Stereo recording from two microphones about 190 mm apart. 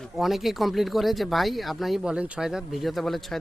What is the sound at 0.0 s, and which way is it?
Speech, centre (ahead or behind).